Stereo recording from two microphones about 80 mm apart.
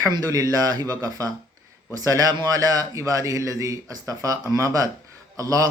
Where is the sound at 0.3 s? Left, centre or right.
Right.